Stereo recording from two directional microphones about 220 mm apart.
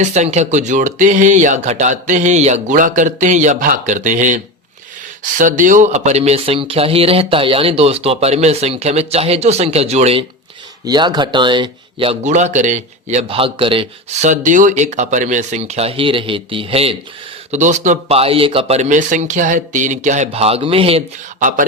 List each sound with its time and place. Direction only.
0.0 s speech: 30° right (ahead or behind)